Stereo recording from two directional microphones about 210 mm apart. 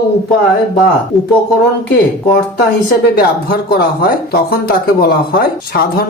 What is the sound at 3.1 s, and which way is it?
Speech, 45° left (ahead or behind).